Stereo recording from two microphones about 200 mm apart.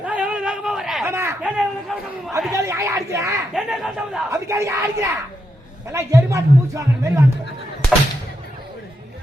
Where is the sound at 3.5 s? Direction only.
Centre (ahead or behind).